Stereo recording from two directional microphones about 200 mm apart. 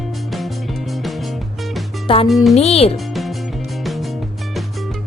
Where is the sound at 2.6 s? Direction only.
30° left (ahead or behind).